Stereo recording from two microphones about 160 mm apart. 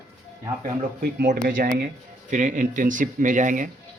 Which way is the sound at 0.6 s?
85° right.